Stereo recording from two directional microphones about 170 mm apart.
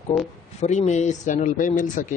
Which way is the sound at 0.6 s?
40° left (ahead or behind).